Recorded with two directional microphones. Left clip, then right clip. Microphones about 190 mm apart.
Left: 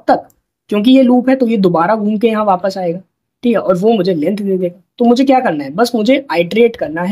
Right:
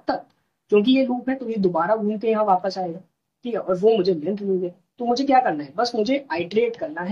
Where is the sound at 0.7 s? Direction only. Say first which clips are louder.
Left 8 dB; 45° left (ahead or behind).